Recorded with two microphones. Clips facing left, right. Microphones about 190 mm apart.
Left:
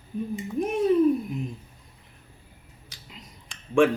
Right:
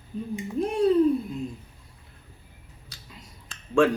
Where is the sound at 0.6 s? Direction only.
15° left (ahead or behind).